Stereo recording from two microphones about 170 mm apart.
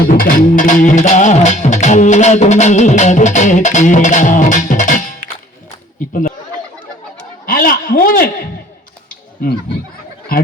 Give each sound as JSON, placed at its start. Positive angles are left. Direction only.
{"t": 0.2, "sound": "music", "side_deg": 55}
{"t": 7.4, "sound": "a man's voice", "side_deg": 55}
{"t": 9.0, "sound": "a sound", "side_deg": 60}